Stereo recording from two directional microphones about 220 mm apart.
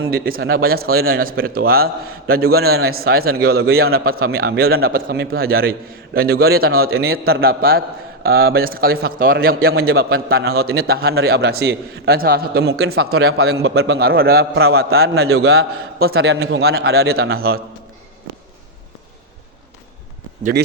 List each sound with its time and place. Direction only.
0.1 s a man's voice: 45° right (ahead or behind)